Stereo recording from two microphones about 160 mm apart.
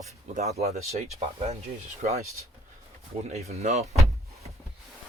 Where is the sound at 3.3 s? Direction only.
40° right (ahead or behind).